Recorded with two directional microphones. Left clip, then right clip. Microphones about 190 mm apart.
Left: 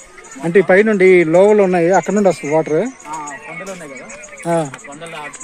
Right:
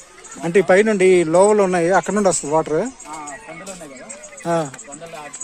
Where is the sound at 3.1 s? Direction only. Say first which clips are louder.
Left 5 dB; 25° left (ahead or behind).